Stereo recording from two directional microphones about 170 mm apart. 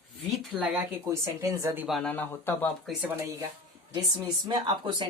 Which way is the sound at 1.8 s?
5° left (ahead or behind).